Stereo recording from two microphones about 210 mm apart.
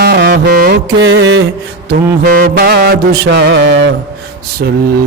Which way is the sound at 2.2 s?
40° right (ahead or behind).